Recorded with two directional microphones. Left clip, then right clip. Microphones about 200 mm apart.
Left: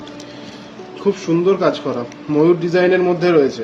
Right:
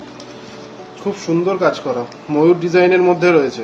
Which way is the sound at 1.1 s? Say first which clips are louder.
Left 1 dB; 45° left (ahead or behind).